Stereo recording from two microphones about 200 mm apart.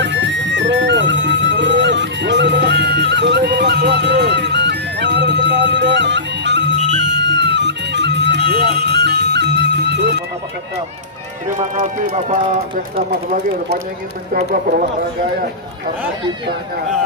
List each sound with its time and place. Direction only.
0.0 s music: 65° right (ahead or behind)
11.8 s speech: 40° right (ahead or behind)
14.3 s speech: 45° right (ahead or behind)